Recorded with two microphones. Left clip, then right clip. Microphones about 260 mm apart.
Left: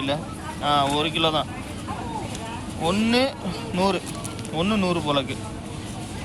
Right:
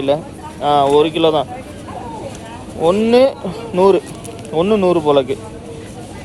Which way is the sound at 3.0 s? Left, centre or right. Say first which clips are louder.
Right 11 dB; centre.